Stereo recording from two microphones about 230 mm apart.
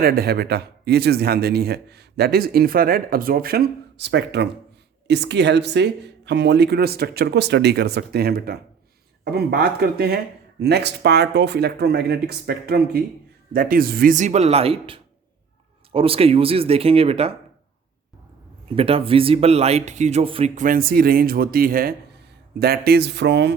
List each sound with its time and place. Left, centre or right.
0.0 s speech: right
18.8 s speech: right